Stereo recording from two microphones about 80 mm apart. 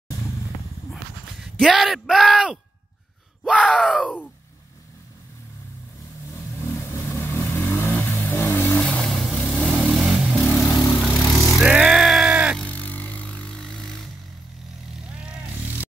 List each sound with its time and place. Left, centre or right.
1.4 s speech: centre
3.4 s groan: centre
3.8 s speech: centre
6.6 s vehicle: left
8.8 s vehicle: centre
10.7 s vehicle: left
11.3 s vehicle: centre
11.6 s music: centre
12.5 s a sound: centre